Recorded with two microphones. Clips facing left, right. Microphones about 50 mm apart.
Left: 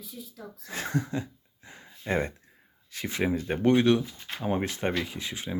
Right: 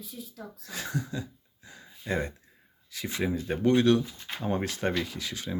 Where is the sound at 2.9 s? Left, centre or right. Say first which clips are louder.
Left 2 dB; left.